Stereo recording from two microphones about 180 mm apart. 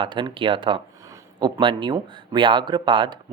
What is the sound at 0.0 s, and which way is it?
Speech, 25° right (ahead or behind).